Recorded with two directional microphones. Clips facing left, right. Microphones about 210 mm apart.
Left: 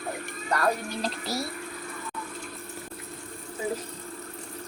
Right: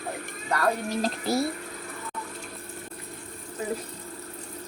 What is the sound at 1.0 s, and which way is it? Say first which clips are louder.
Speech: right 5 dB; 50° right (ahead or behind).